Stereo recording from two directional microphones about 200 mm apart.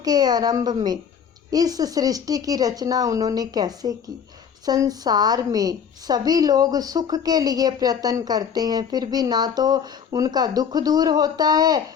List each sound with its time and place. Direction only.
0.0 s a woman's voice: 20° right (ahead or behind)